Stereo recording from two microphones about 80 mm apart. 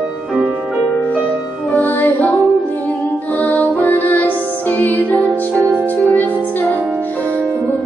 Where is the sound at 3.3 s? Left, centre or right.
Centre.